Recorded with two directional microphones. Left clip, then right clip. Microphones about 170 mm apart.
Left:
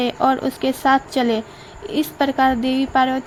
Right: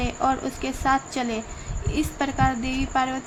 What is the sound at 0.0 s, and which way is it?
Speech, 35° left (ahead or behind).